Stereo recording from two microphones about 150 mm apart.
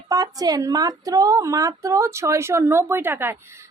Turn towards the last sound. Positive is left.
turn(degrees=-15)  # may be behind; listen again after turning